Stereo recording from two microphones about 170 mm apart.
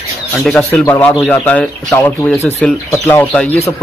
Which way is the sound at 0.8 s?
15° left (ahead or behind).